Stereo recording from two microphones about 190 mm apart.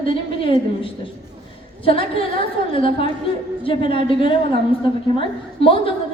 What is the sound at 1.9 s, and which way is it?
A woman's voice, 30° left (ahead or behind).